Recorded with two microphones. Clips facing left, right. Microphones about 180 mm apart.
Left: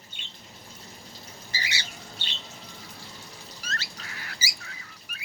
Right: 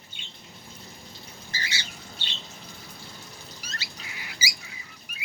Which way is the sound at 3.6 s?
10° right (ahead or behind).